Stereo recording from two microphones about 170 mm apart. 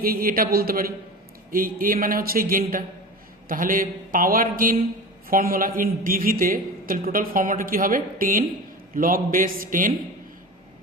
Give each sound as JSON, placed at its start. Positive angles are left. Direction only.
{"t": 0.0, "sound": "a man's voice", "side_deg": -60}